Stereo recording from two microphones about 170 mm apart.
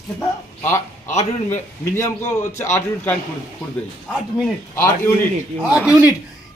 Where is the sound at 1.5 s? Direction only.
15° left (ahead or behind).